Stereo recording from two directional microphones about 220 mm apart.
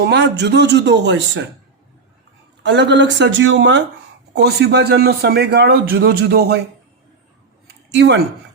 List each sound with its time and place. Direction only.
0.1 s a man's voice: 50° right (ahead or behind)
2.6 s a man's voice: 55° right (ahead or behind)
7.9 s a man's voice: 50° right (ahead or behind)